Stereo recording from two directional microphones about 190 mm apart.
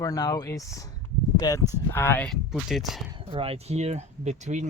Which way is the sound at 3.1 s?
30° right (ahead or behind).